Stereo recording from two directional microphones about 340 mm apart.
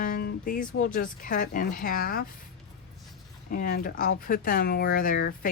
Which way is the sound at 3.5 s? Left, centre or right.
Left.